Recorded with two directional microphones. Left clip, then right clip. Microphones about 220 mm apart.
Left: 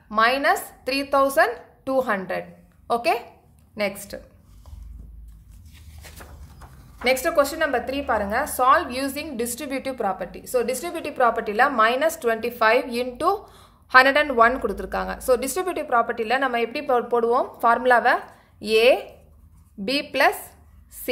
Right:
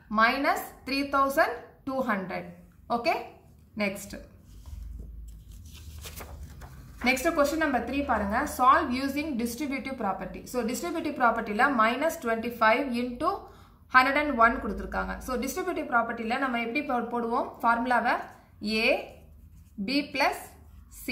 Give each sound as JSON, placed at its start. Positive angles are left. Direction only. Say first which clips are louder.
{"t": 0.1, "sound": "a woman's voice", "louder": "left 5 dB", "side_deg": 45}
{"t": 7.1, "sound": "a woman's voice", "louder": "left 5 dB", "side_deg": 45}